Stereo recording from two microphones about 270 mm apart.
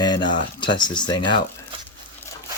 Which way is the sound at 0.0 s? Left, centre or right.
Centre.